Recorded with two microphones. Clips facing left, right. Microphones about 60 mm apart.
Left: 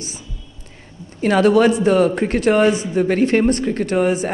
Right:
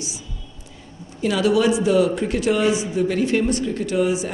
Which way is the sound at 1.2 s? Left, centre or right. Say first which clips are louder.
Left 5 dB; left.